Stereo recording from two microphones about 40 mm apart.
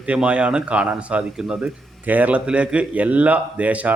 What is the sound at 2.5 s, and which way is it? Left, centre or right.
Speech, right.